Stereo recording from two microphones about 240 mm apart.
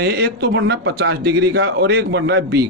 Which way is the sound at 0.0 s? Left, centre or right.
Right.